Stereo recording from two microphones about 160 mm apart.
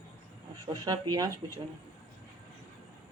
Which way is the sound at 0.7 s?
20° right (ahead or behind).